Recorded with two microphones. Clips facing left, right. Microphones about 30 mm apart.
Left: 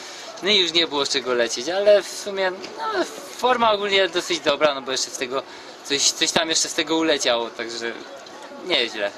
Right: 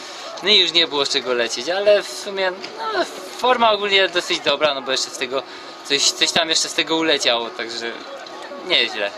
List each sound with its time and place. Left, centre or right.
0.4 s a man's voice: right
2.8 s speech: right
3.6 s a man's voice: right
3.9 s speech: right
4.4 s a man's voice: right
5.9 s a man's voice: right
8.7 s a man's voice: right